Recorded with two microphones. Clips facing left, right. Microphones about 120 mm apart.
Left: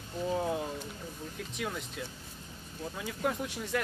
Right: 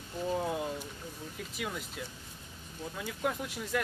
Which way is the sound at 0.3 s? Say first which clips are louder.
Left 1 dB; centre (ahead or behind).